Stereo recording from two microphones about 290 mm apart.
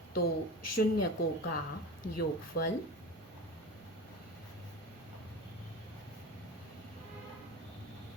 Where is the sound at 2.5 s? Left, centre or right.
Left.